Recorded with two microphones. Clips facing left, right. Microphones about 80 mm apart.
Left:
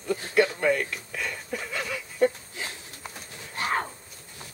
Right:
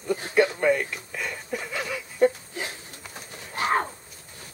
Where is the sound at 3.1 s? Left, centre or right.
Centre.